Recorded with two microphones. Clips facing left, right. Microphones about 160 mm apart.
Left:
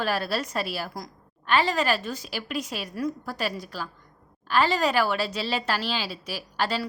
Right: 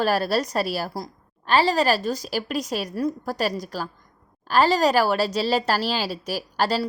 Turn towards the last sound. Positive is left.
turn(degrees=-40)  # may be behind; listen again after turning